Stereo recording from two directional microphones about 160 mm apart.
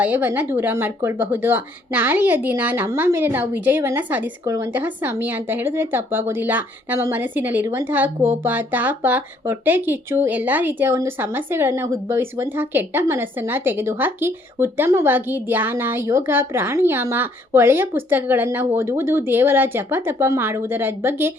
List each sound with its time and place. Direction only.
0.0 s a woman's voice: 10° right (ahead or behind)